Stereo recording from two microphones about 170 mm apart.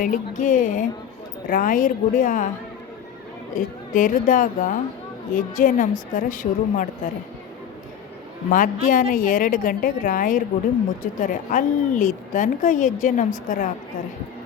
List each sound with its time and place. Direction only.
0.0 s a woman's voice: 50° left (ahead or behind)
3.5 s a woman's voice: 50° left (ahead or behind)
8.4 s a woman's voice: 50° left (ahead or behind)